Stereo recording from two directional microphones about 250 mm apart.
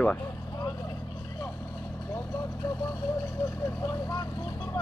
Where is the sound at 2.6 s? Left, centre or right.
Centre.